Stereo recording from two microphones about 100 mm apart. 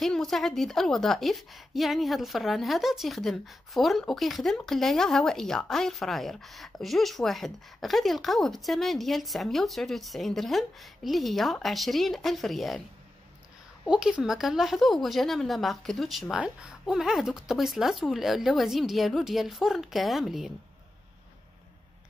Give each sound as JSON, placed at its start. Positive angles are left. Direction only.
{"t": 0.0, "sound": "speech", "side_deg": 5}
{"t": 13.8, "sound": "speech", "side_deg": -5}